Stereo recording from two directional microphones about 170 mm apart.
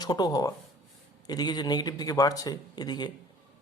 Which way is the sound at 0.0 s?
25° left (ahead or behind).